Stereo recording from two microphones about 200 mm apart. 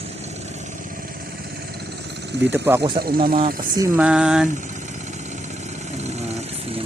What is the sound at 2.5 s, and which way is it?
Speech, 10° right (ahead or behind).